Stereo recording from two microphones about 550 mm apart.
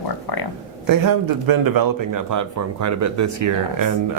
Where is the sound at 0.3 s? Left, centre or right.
Left.